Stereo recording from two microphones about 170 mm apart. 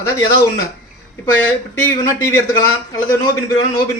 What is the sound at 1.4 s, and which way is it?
Speech, 10° left (ahead or behind).